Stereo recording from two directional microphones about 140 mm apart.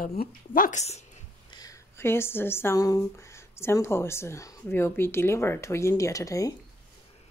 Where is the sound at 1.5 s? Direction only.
25° left (ahead or behind).